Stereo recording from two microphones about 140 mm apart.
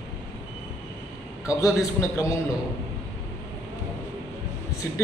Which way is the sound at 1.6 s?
20° left (ahead or behind).